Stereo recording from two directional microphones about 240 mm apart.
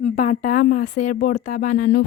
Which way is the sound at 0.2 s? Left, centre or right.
Left.